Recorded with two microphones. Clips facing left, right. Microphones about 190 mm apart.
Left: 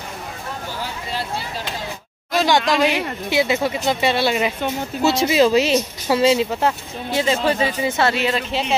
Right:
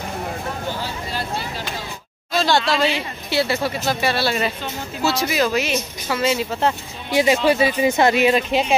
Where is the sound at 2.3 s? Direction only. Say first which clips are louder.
Left 2 dB; 15° left (ahead or behind).